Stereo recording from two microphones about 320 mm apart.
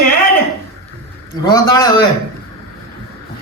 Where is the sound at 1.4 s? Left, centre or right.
Centre.